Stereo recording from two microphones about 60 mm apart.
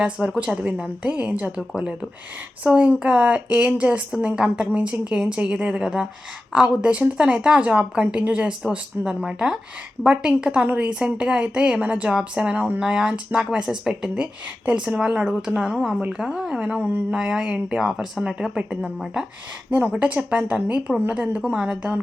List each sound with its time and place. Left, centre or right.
0.0 s a woman's voice: centre
2.6 s a woman's voice: right
17.7 s a woman's voice: centre
20.0 s a woman's voice: right